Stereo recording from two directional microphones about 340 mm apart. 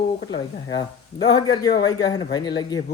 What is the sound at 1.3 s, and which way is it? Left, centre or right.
Speech, centre.